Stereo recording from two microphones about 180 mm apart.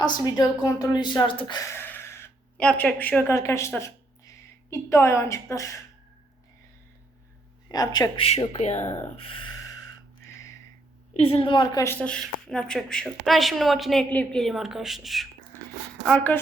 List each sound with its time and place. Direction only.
0.0 s a woman's voice: 20° left (ahead or behind)
7.7 s speech: 20° left (ahead or behind)
11.2 s a woman's voice: 30° left (ahead or behind); by 16.4 s 5° left (ahead or behind)